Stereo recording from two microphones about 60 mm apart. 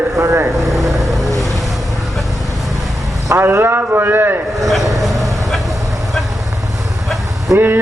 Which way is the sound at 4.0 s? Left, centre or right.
Right.